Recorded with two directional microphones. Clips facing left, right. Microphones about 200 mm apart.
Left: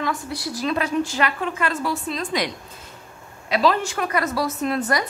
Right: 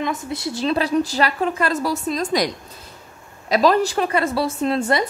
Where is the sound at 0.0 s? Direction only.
20° right (ahead or behind).